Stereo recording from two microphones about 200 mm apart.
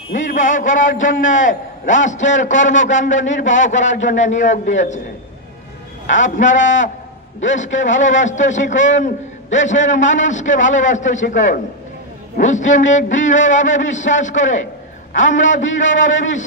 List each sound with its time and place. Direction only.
0.1 s a man's voice: 40° left (ahead or behind)
6.0 s a man's voice: 40° left (ahead or behind)
6.5 s a man's voice: 70° left (ahead or behind)
7.9 s a man's voice: 70° left (ahead or behind)
8.2 s a man's voice: 35° left (ahead or behind)
15.6 s a man's voice: 70° left (ahead or behind)